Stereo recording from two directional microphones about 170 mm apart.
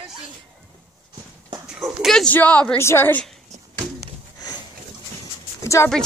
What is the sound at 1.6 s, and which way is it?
Speech, 5° right (ahead or behind).